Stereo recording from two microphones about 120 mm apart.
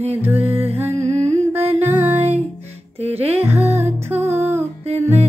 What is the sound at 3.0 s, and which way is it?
Music, 55° right (ahead or behind).